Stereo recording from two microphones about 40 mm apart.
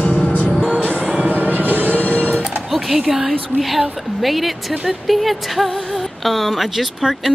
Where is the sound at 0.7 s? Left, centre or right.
Right.